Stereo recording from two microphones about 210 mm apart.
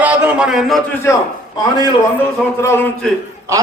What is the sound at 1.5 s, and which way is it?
A man's voice, 20° left (ahead or behind).